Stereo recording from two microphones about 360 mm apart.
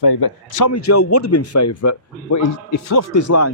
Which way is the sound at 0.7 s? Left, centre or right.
Left.